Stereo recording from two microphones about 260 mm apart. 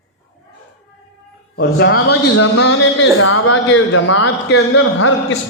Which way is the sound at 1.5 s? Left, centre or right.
Left.